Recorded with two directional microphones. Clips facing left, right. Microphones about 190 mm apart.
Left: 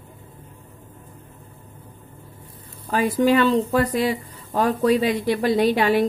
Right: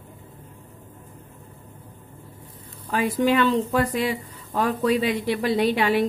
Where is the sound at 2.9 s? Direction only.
40° left (ahead or behind).